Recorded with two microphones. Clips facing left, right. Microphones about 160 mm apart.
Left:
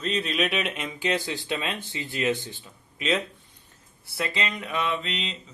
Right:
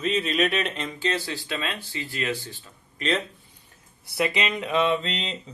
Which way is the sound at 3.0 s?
Centre (ahead or behind).